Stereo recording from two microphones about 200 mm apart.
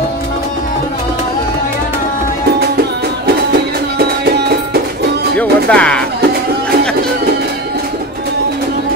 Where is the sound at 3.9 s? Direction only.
55° right (ahead or behind).